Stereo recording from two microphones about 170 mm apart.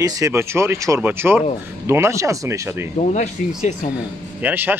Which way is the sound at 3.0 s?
45° left (ahead or behind).